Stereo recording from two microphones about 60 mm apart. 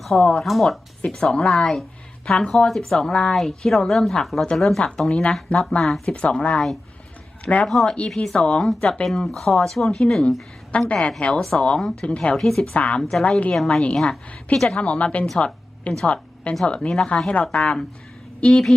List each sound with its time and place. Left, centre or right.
0.0 s a woman's voice: centre
5.8 s speech: centre
6.1 s a woman's voice: centre
7.7 s a woman's voice: centre
10.7 s a woman's voice: left
11.8 s speech: centre
12.0 s a woman's voice: centre
12.4 s speech: centre
12.7 s a woman's voice: left
13.0 s a woman's voice: centre
15.4 s a sound: centre
16.0 s a woman's voice: left